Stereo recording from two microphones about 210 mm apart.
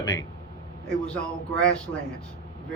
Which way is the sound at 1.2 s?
5° left (ahead or behind).